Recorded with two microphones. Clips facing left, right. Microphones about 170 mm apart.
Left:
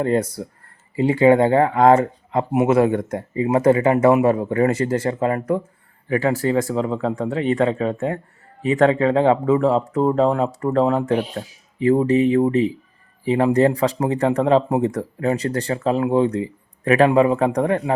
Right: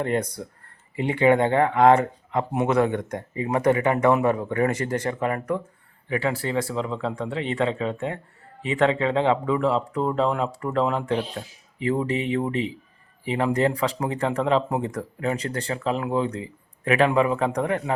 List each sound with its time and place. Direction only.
0.0 s speech: 35° left (ahead or behind)
6.1 s speech: 40° left (ahead or behind)